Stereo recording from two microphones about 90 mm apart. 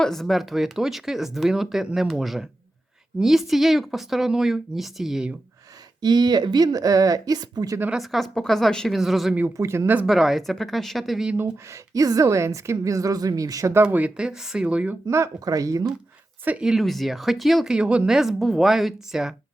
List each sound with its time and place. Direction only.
0.0 s a woman's voice: 5° left (ahead or behind)
6.0 s speech: 50° right (ahead or behind)
7.9 s a woman's voice: centre (ahead or behind)
9.6 s speech: 30° right (ahead or behind)
10.1 s a woman's voice: centre (ahead or behind)
11.5 s a woman's voice: 35° right (ahead or behind)
13.8 s speech: 15° right (ahead or behind)
15.0 s a woman's voice: 35° right (ahead or behind)
16.4 s speech: 20° right (ahead or behind)
16.6 s a woman's voice: centre (ahead or behind)